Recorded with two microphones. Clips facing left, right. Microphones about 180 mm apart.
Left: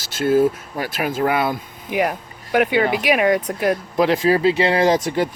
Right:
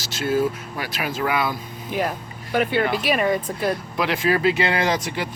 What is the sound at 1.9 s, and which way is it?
Speech, 15° left (ahead or behind).